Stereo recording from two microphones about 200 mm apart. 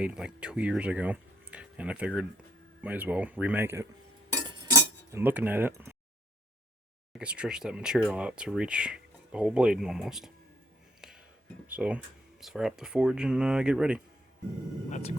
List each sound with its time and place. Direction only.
0.0 s speech: 5° right (ahead or behind)
4.4 s cutlery: 20° right (ahead or behind)
7.1 s speech: 5° right (ahead or behind)
11.0 s whispering: 5° right (ahead or behind)
11.7 s speech: 5° right (ahead or behind)
14.8 s speech: 35° left (ahead or behind)